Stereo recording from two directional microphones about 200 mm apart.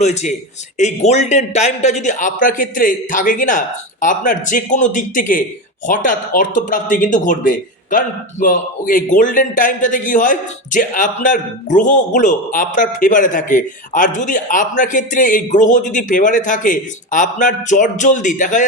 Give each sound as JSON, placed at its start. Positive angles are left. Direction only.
{"t": 0.0, "sound": "a man's voice", "side_deg": 35}